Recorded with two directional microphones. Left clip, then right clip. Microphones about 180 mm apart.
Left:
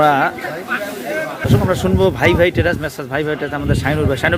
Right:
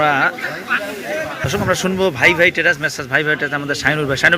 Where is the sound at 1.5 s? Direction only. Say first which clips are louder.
Left 1 dB; 10° left (ahead or behind).